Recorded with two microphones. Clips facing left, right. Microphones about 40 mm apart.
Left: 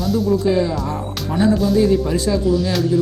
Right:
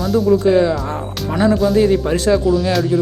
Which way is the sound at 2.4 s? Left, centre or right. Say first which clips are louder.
Right 2 dB; centre.